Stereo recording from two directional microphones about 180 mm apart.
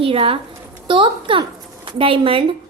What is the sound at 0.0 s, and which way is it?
A woman's voice, 30° right (ahead or behind).